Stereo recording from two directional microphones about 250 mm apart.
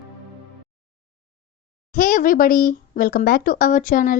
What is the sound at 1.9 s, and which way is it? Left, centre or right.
A woman's voice, left.